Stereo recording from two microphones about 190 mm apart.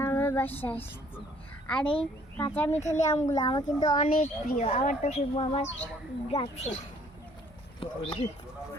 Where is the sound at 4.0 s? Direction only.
45° left (ahead or behind).